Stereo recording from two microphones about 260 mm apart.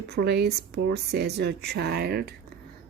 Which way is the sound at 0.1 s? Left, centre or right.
Right.